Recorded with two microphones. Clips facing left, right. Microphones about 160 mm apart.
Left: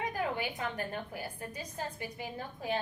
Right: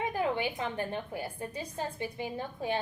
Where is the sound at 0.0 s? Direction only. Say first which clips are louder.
Right 4 dB; 25° right (ahead or behind).